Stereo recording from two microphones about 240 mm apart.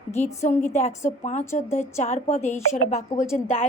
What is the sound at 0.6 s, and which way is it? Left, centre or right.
A woman's voice, left.